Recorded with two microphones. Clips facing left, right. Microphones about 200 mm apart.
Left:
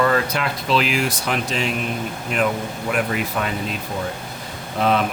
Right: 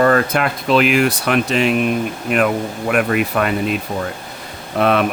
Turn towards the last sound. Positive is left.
turn(degrees=-65)  # may be behind; listen again after turning